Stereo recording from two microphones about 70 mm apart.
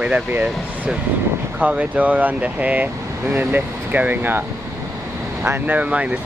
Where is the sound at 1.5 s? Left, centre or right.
Right.